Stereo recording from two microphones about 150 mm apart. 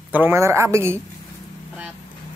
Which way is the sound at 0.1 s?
15° right (ahead or behind).